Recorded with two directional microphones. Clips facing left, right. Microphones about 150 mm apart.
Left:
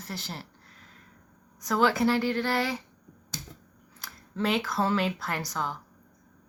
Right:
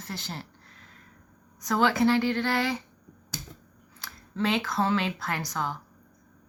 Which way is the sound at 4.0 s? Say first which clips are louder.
Right 1 dB; 10° left (ahead or behind).